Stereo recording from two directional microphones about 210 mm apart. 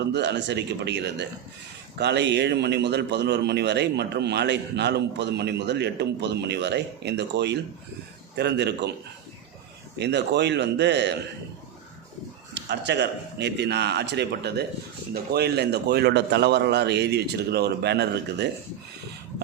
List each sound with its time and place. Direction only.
0.1 s speech: 55° right (ahead or behind)
10.0 s speech: 55° right (ahead or behind)
12.5 s speech: 55° right (ahead or behind)